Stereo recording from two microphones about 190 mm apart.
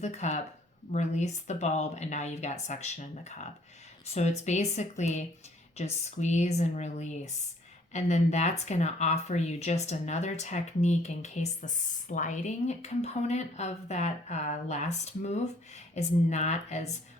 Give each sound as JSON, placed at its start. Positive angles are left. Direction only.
{"t": 0.0, "sound": "speech", "side_deg": 35}